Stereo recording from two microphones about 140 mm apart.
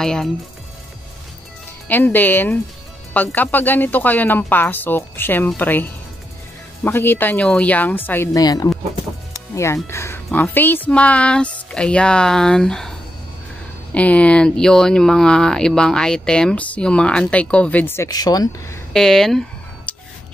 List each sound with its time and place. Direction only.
0.0 s speech: 5° left (ahead or behind)
1.9 s speech: 15° left (ahead or behind)
8.3 s speech: 25° left (ahead or behind)
9.3 s music: 20° left (ahead or behind)
9.8 s speech: 20° left (ahead or behind)
13.9 s speech: 10° left (ahead or behind); by 18.8 s 25° left (ahead or behind)
18.9 s speech: 5° left (ahead or behind)
19.9 s a sound: 10° left (ahead or behind)